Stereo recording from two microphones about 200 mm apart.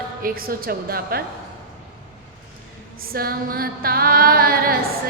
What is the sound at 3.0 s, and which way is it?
Female singing, 50° right (ahead or behind).